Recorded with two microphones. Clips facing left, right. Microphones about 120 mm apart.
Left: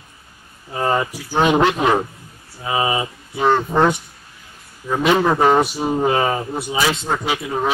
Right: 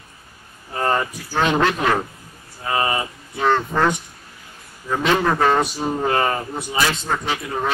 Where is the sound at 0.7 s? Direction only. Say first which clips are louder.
Left 1 dB; 10° left (ahead or behind).